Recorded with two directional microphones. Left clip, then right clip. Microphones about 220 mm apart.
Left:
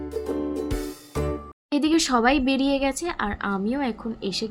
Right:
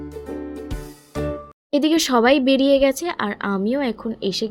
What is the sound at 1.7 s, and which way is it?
Speech, 15° right (ahead or behind).